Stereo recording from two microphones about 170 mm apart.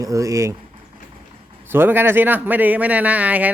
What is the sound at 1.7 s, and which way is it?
Speech, 15° right (ahead or behind).